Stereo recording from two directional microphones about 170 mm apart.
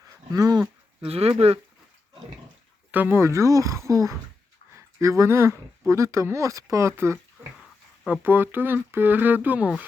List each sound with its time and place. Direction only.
0.0 s a sound: 20° right (ahead or behind)
1.0 s speech: 35° right (ahead or behind)
2.9 s speech: 10° right (ahead or behind)